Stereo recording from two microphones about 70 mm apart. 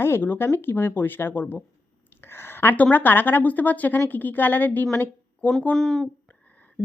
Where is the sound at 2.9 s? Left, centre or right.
Left.